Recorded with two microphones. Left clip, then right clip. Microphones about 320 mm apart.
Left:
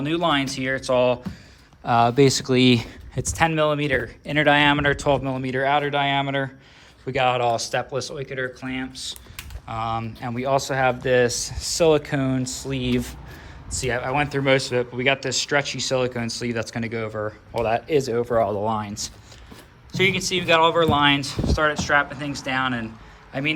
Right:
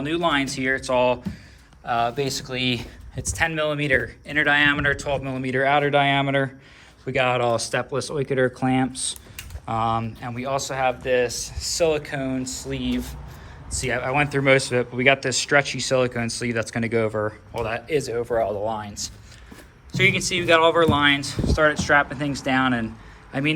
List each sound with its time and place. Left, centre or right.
0.0 s speech: centre
19.9 s speech: centre